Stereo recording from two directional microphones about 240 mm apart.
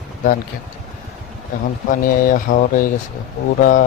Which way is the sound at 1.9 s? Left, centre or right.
Left.